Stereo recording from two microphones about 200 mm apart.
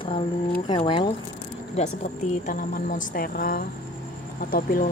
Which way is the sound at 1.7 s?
35° left (ahead or behind).